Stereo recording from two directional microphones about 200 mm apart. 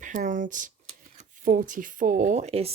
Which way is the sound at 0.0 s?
40° right (ahead or behind).